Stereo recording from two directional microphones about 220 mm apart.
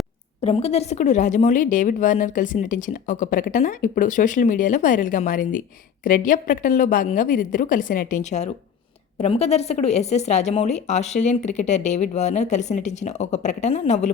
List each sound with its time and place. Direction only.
0.4 s a woman's voice: 30° left (ahead or behind)